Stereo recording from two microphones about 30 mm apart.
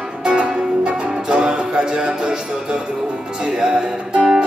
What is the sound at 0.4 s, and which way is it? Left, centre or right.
Music, right.